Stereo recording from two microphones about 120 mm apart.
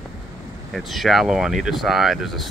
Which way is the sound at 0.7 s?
Centre (ahead or behind).